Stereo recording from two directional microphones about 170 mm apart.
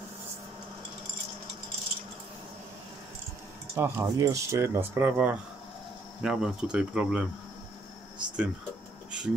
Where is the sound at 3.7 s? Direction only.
15° right (ahead or behind).